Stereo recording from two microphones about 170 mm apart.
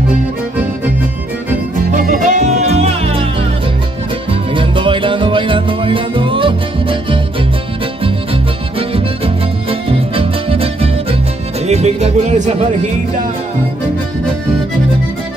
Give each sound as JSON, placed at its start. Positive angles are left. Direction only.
{"t": 2.0, "sound": "music", "side_deg": -50}